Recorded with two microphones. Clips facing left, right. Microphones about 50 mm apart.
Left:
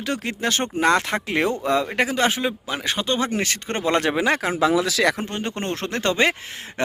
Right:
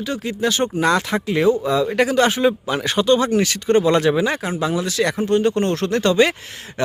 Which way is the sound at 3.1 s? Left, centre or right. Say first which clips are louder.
Right 6 dB; left.